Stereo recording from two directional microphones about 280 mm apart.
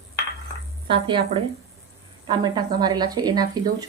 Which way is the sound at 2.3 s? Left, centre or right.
Centre.